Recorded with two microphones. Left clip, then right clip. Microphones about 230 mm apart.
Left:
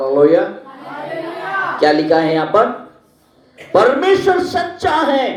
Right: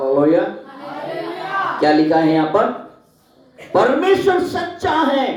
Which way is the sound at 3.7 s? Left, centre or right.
Left.